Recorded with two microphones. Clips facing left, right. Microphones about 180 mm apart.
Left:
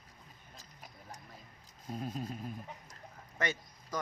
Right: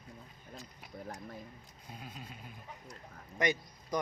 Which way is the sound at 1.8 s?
40° left (ahead or behind).